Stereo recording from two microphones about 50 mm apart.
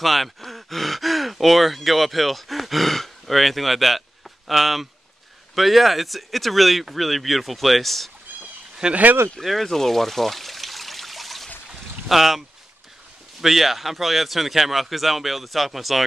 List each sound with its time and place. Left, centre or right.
0.0 s speech: centre
8.8 s speech: centre
9.4 s trickle: centre
12.1 s speech: centre